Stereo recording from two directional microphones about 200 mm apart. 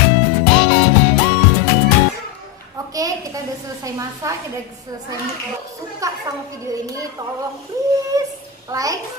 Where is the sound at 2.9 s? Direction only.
15° right (ahead or behind).